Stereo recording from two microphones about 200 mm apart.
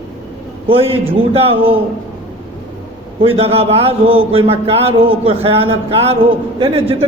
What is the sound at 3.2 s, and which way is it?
A man's voice, 30° right (ahead or behind).